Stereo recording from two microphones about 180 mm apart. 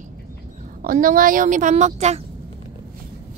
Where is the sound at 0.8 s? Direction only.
50° right (ahead or behind).